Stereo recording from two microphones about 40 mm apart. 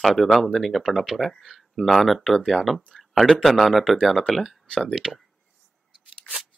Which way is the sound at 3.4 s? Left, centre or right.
Centre.